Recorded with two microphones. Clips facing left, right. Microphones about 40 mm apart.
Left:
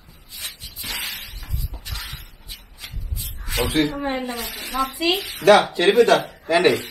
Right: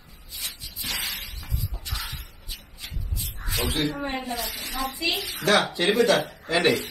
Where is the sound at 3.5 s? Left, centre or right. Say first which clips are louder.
Left 6 dB; left.